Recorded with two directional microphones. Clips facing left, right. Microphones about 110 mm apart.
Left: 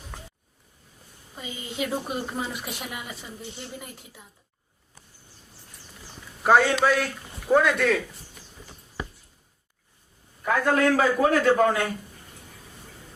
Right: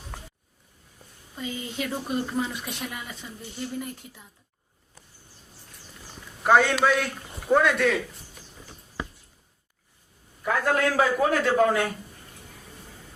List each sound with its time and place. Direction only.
1.4 s speech: 5° left (ahead or behind)
6.4 s speech: centre (ahead or behind)
10.4 s a man's voice: 30° left (ahead or behind)
10.9 s speech: centre (ahead or behind)